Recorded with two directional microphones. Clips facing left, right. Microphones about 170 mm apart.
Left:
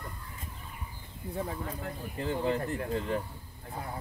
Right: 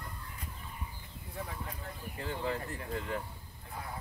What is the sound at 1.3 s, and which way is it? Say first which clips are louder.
Speech: left 7 dB; 30° left (ahead or behind).